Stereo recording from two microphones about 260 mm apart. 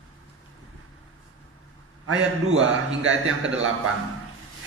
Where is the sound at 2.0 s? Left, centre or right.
Right.